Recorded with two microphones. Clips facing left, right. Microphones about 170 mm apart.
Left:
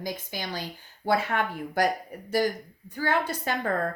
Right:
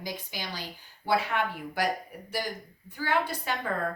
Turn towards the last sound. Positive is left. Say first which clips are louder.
# left 2 dB
turn(degrees=45)  # may be behind; listen again after turning